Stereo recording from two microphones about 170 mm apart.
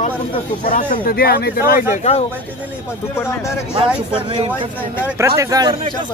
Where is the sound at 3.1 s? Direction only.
15° left (ahead or behind).